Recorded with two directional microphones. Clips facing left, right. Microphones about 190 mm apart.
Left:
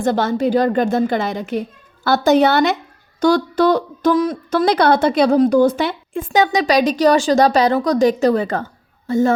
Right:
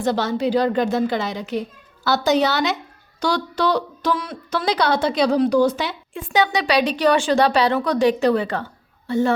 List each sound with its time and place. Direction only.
0.0 s a woman's voice: 50° left (ahead or behind)